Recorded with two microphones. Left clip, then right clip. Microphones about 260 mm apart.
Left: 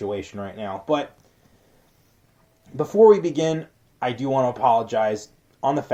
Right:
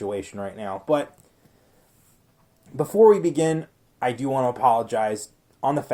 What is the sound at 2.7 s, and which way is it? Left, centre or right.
Speech, right.